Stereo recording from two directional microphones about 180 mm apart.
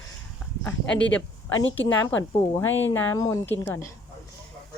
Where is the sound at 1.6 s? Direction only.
90° left.